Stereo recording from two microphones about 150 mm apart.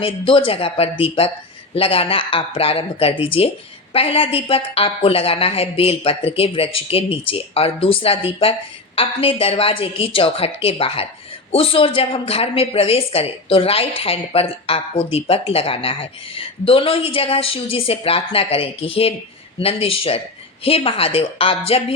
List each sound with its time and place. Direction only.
0.0 s a woman's voice: 35° left (ahead or behind)